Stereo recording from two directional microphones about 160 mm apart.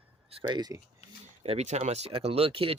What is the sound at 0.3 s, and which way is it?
Speech, 30° right (ahead or behind).